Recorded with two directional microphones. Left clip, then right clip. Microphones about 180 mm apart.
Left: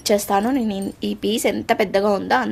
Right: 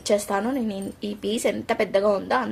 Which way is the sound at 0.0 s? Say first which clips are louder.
Left 4 dB; 45° left (ahead or behind).